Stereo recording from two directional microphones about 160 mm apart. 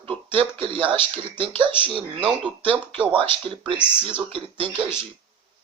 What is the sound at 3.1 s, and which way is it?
Speech, 35° right (ahead or behind).